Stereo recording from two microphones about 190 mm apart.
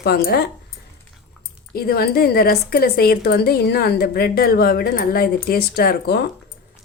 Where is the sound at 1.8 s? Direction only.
55° left (ahead or behind).